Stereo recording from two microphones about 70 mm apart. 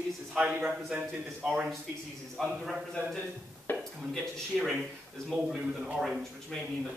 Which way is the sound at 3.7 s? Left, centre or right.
Left.